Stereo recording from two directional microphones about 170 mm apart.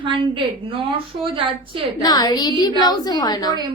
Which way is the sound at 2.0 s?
20° left (ahead or behind).